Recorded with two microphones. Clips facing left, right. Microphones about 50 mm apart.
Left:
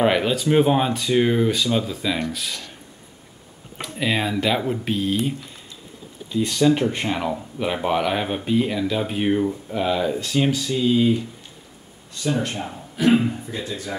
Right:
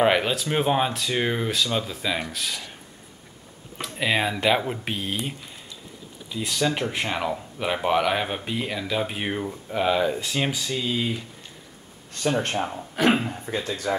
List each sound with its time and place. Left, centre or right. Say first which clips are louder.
0.0 s speech: left 2 dB; centre
4.0 s speech: left 1 dB; centre
6.3 s speech: left 7 dB; centre
12.1 s speech: even; right